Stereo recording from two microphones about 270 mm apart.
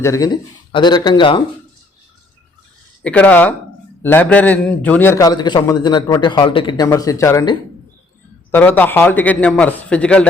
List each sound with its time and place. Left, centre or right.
0.0 s a man's voice: centre
3.0 s a man's voice: centre